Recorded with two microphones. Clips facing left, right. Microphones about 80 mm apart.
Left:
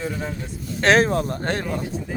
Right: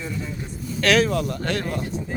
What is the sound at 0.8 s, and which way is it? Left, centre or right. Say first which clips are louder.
Speech: left 2 dB; left.